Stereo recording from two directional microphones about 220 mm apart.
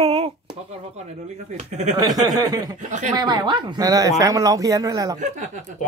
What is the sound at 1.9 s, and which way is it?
Speech, 15° right (ahead or behind).